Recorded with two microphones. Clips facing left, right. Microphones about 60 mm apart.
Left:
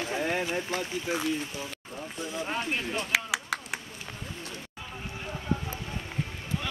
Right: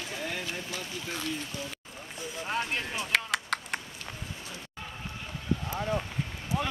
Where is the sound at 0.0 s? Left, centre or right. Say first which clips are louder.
Left 6 dB; left.